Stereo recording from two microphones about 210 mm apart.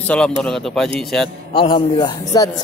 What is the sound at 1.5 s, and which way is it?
Speech, 25° left (ahead or behind).